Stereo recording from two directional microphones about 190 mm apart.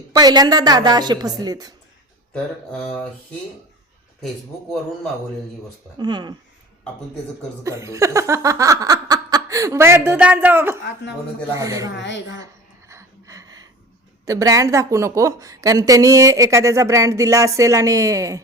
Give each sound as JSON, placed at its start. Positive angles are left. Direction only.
{"t": 0.1, "sound": "a woman's voice", "side_deg": -20}
{"t": 2.3, "sound": "speech", "side_deg": 5}
{"t": 6.0, "sound": "a woman's voice", "side_deg": -20}
{"t": 7.6, "sound": "a woman's voice", "side_deg": -15}
{"t": 11.9, "sound": "speech", "side_deg": 70}
{"t": 12.9, "sound": "a sound", "side_deg": -15}
{"t": 14.3, "sound": "a woman's voice", "side_deg": -20}